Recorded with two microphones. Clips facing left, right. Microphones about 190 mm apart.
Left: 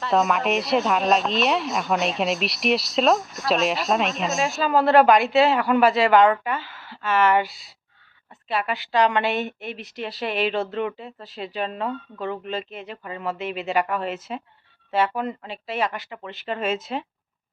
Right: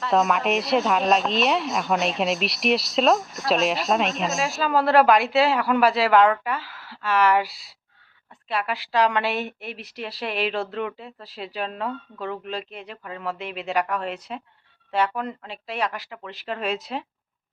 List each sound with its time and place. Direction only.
0.0 s a woman's voice: centre (ahead or behind)